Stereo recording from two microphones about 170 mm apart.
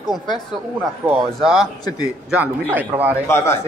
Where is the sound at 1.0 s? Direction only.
5° right (ahead or behind).